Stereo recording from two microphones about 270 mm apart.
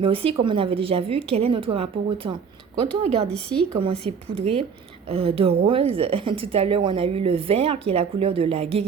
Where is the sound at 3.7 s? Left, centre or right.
Right.